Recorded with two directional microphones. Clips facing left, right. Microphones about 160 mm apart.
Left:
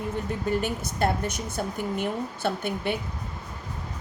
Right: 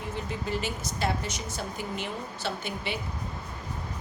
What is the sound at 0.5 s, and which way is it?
A woman's voice, 55° left (ahead or behind).